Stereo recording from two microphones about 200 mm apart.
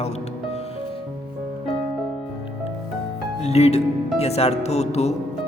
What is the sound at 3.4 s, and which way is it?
A man's voice, 30° left (ahead or behind).